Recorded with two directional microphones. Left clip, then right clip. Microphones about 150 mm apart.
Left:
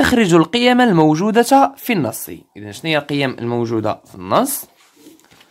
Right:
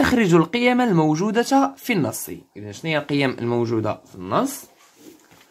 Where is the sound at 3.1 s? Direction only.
20° left (ahead or behind).